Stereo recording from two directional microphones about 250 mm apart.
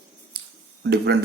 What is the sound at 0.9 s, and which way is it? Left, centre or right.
Speech, right.